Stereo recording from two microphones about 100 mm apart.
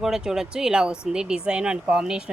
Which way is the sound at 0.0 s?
5° right (ahead or behind).